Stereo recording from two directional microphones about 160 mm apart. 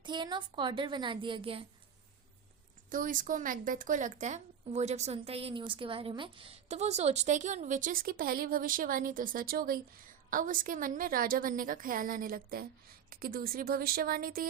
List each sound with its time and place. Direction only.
0.0 s a child's voice: 30° right (ahead or behind)
2.9 s a woman's voice: 55° right (ahead or behind)